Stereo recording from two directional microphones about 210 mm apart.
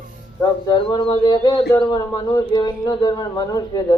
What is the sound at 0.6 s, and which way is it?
Speech, 20° left (ahead or behind).